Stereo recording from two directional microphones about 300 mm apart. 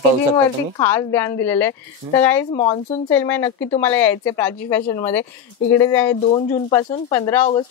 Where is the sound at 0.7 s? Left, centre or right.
Centre.